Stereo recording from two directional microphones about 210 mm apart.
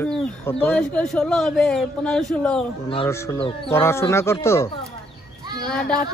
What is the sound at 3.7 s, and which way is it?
Speech, 10° left (ahead or behind).